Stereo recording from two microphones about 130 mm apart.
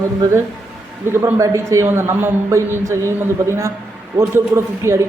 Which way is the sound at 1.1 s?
25° right (ahead or behind).